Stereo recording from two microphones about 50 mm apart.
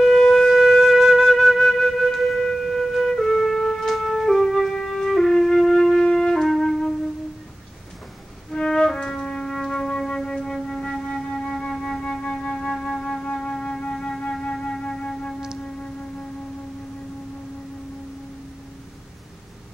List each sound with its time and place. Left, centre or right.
0.0 s wind instrument: centre
8.5 s music: centre